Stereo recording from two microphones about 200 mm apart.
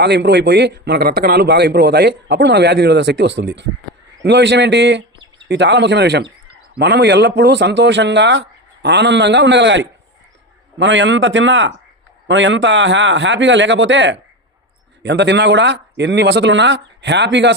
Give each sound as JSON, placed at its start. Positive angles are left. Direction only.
{"t": 0.0, "sound": "a man's voice", "side_deg": -55}